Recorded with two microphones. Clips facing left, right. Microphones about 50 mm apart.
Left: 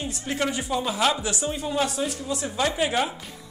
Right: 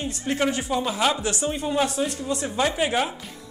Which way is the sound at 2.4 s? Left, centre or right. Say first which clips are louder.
Right 1 dB; centre.